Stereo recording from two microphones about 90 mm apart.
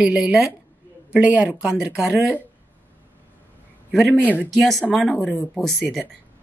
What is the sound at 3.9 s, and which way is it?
A man's voice, centre (ahead or behind).